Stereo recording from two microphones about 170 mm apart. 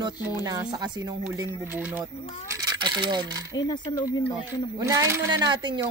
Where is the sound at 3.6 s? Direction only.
25° left (ahead or behind).